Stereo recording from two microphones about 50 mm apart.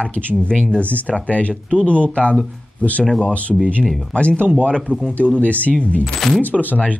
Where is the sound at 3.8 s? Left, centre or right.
Centre.